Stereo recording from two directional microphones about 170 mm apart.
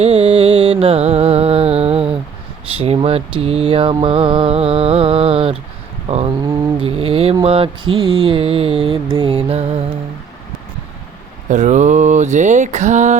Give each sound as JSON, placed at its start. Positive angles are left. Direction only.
{"t": 0.0, "sound": "music", "side_deg": -35}
{"t": 2.7, "sound": "mantra", "side_deg": -35}
{"t": 6.4, "sound": "a sound", "side_deg": -15}
{"t": 6.8, "sound": "mantra", "side_deg": -35}
{"t": 11.4, "sound": "speech", "side_deg": -45}